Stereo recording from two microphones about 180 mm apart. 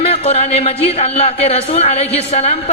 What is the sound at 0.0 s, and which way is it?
A man's voice, 35° left (ahead or behind).